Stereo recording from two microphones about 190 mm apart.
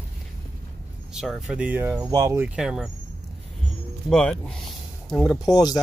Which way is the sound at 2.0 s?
20° right (ahead or behind).